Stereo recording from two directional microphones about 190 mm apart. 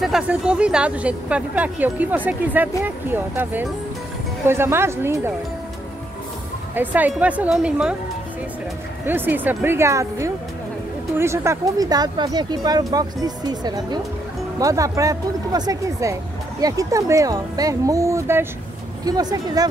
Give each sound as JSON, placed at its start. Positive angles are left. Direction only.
{"t": 0.0, "sound": "speech", "side_deg": -5}
{"t": 6.7, "sound": "speech", "side_deg": -10}
{"t": 9.0, "sound": "speech", "side_deg": -10}